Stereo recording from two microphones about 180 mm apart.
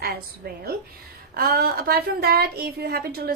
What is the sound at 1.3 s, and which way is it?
A woman's voice, 55° right (ahead or behind).